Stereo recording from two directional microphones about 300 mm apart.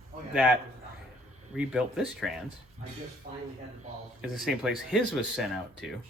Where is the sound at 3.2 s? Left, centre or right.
Right.